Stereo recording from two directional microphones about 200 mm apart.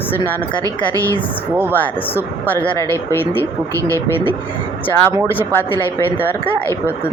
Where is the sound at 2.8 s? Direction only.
15° right (ahead or behind).